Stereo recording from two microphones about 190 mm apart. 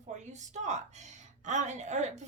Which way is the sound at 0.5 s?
40° right (ahead or behind).